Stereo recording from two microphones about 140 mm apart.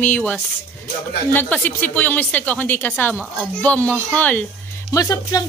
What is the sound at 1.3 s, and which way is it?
A woman's voice, 15° left (ahead or behind).